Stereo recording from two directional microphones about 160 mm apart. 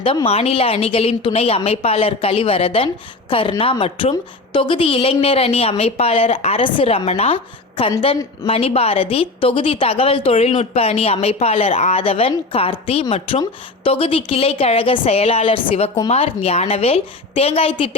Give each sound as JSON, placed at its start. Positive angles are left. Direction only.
{"t": 0.3, "sound": "a woman's voice", "side_deg": 40}